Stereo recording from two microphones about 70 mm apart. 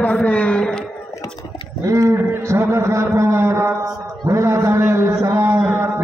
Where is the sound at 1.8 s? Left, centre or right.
Right.